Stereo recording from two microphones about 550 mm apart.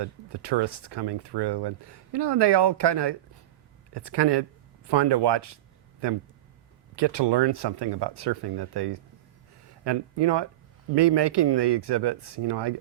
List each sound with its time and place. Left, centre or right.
0.0 s speech: right
6.9 s speech: right